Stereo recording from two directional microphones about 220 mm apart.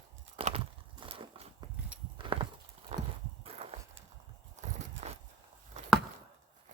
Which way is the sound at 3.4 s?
25° right (ahead or behind).